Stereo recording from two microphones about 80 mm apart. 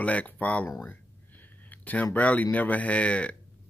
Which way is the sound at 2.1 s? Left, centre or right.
Left.